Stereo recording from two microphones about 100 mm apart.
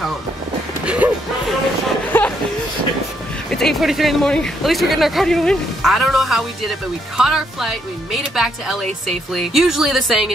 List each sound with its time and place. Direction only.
0.8 s music: 15° right (ahead or behind)
2.1 s a sound: 20° left (ahead or behind)
3.4 s speech: 5° left (ahead or behind)